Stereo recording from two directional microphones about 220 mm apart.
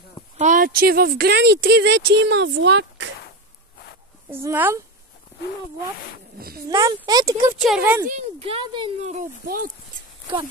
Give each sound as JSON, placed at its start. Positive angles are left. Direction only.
{"t": 0.4, "sound": "speech", "side_deg": -35}
{"t": 4.3, "sound": "speech", "side_deg": -10}
{"t": 6.7, "sound": "speech", "side_deg": -20}
{"t": 7.5, "sound": "speech", "side_deg": 0}
{"t": 8.1, "sound": "speech", "side_deg": -30}